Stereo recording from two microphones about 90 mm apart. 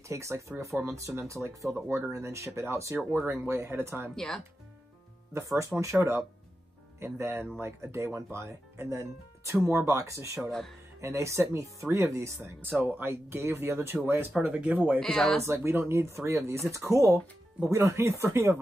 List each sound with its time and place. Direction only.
0.1 s speech: 35° right (ahead or behind)
4.1 s speech: 5° left (ahead or behind)
5.3 s speech: 35° right (ahead or behind)
12.6 s speech: 20° right (ahead or behind)
14.4 s speech: 15° right (ahead or behind)
15.0 s speech: 5° left (ahead or behind)
15.4 s speech: 30° right (ahead or behind)